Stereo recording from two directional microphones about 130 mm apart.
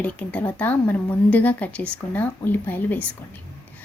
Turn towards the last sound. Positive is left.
turn(degrees=15)  # may be behind; listen again after turning